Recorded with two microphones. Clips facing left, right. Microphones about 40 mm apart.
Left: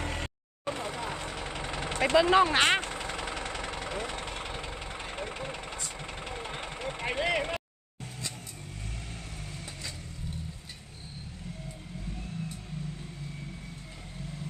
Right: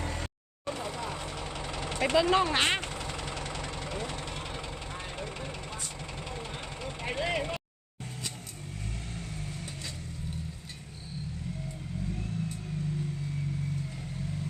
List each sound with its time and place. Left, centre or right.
0.1 s vehicle: left
2.1 s speech: centre
2.9 s vehicle: left